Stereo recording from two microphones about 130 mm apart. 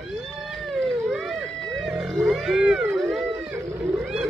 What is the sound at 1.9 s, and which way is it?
Music, centre (ahead or behind).